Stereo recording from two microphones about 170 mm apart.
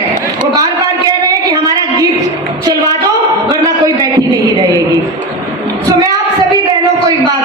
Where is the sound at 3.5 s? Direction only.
20° right (ahead or behind).